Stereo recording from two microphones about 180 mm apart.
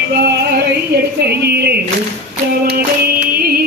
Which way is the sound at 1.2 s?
65° right (ahead or behind).